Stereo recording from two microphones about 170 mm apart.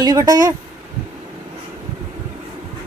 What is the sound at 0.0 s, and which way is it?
Speech, 20° right (ahead or behind).